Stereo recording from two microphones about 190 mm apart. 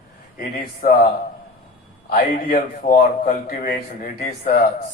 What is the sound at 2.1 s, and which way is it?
A man's voice, 45° left (ahead or behind).